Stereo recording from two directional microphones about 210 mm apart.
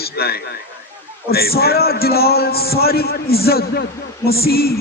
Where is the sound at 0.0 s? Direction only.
50° left (ahead or behind).